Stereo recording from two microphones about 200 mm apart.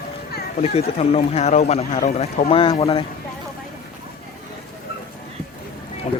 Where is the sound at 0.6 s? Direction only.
30° left (ahead or behind).